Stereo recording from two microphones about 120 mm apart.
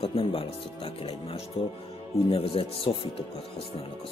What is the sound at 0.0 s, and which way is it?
Speech, 50° left (ahead or behind).